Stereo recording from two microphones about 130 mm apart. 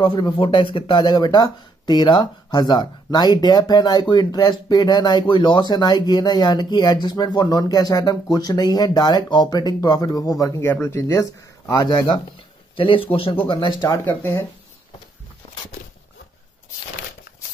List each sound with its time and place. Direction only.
0.0 s speech: 40° left (ahead or behind)
12.7 s speech: 40° left (ahead or behind)